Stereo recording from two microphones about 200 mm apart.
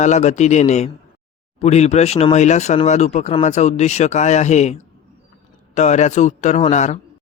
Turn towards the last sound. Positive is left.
turn(degrees=35)  # may be behind; listen again after turning